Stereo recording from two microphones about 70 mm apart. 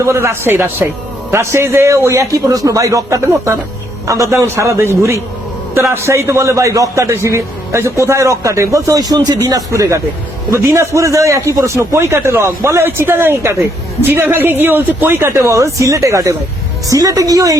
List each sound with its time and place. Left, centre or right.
0.0 s a man's voice: right
3.2 s a man's voice: right